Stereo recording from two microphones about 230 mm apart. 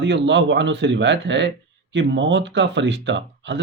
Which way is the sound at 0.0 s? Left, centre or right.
Right.